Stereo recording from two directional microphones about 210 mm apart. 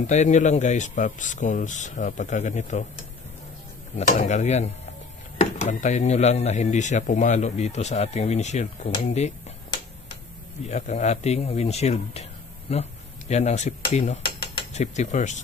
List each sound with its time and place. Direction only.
0.0 s speech: 35° left (ahead or behind)
3.9 s speech: 35° left (ahead or behind)
13.3 s cutlery: 30° left (ahead or behind)